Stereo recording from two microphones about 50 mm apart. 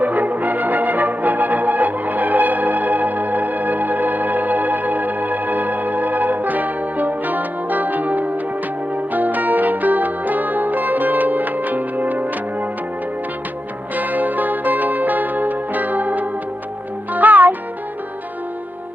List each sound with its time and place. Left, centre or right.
0.0 s music: right
13.9 s music: right